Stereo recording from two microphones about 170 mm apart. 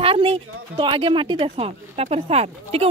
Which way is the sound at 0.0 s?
35° right (ahead or behind).